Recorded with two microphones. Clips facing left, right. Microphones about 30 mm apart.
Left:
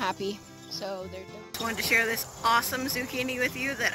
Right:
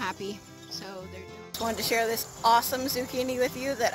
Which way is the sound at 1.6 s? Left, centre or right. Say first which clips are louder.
Right 2 dB; left.